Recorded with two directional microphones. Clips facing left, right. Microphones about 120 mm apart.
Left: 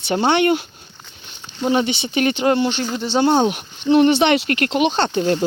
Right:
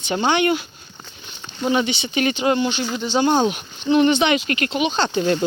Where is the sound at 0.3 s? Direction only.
55° left (ahead or behind).